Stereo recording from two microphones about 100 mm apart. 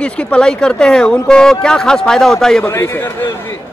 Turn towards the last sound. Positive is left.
turn(degrees=20)  # may be behind; listen again after turning